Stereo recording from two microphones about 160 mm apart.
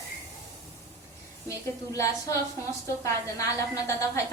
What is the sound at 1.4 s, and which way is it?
A woman's voice, 20° left (ahead or behind).